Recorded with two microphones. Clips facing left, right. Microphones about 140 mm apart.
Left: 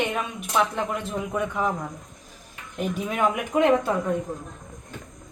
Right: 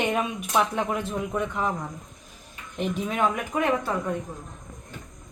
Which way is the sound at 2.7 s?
5° left (ahead or behind).